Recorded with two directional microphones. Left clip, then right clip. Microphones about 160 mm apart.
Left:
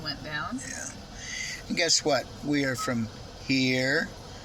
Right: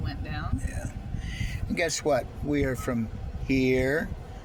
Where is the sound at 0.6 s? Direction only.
40° right (ahead or behind).